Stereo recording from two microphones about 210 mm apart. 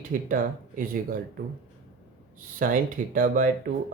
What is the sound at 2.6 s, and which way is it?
Speech, 40° right (ahead or behind).